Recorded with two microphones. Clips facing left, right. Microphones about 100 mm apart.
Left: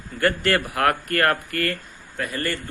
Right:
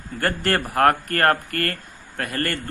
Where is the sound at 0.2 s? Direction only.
35° right (ahead or behind).